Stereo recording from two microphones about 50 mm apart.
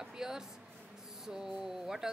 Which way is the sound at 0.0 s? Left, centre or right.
Centre.